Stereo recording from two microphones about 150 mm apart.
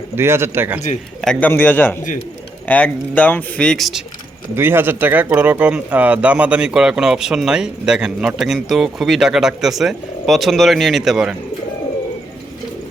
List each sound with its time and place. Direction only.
0.2 s speech: 15° right (ahead or behind)
1.2 s speech: 5° left (ahead or behind)
4.5 s speech: 15° right (ahead or behind)